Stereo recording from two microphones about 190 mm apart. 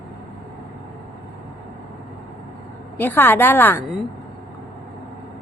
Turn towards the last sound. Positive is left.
turn(degrees=10)  # may be behind; listen again after turning